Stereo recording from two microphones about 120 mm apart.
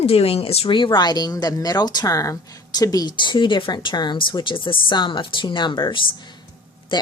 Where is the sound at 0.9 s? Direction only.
35° left (ahead or behind).